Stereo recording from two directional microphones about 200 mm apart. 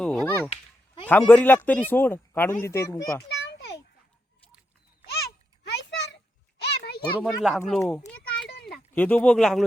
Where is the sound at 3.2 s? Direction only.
55° left (ahead or behind).